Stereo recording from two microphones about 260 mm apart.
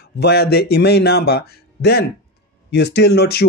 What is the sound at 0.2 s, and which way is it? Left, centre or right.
Speech, left.